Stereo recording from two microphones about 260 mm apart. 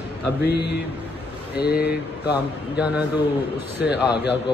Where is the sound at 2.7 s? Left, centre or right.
Centre.